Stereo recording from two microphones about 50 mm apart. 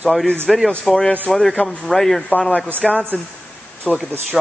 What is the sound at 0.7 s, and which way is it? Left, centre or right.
Speech, centre.